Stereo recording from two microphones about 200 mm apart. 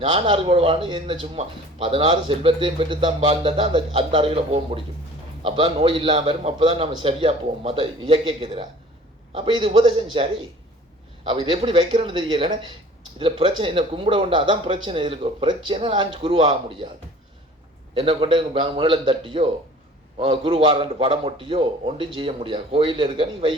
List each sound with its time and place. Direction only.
0.0 s speech: 25° right (ahead or behind)
11.3 s speech: 25° right (ahead or behind)
17.9 s speech: 25° right (ahead or behind)